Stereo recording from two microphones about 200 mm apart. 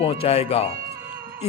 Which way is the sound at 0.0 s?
30° left (ahead or behind).